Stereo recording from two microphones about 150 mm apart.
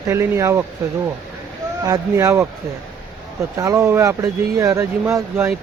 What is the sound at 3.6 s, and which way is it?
Speech, 20° right (ahead or behind).